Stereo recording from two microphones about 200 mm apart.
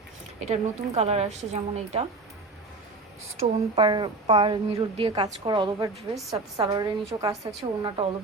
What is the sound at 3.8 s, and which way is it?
A woman's voice, 25° right (ahead or behind).